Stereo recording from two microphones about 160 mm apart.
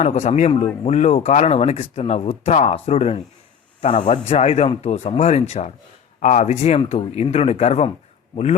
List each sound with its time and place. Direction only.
0.0 s speech: 45° left (ahead or behind)